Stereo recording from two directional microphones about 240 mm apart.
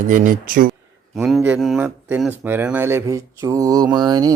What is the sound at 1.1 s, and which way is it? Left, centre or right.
Speech, centre.